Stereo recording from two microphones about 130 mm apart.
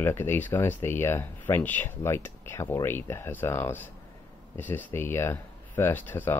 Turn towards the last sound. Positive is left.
turn(degrees=15)  # may be behind; listen again after turning